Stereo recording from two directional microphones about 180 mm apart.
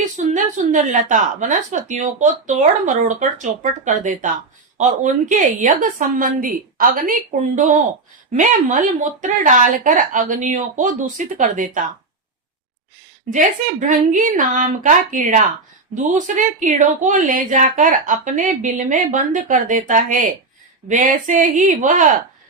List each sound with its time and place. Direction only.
0.3 s a woman's voice: 45° right (ahead or behind)
13.3 s a woman's voice: 45° right (ahead or behind)